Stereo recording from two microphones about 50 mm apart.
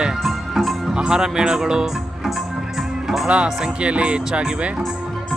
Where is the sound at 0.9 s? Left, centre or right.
Centre.